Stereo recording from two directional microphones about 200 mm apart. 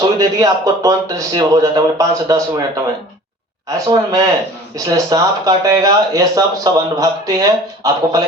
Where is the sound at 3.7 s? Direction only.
15° right (ahead or behind).